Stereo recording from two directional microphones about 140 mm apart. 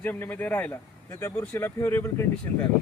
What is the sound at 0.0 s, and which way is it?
Speech, 15° left (ahead or behind).